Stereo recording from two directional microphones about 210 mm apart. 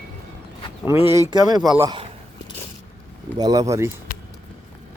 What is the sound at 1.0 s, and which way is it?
A man's voice, 15° right (ahead or behind).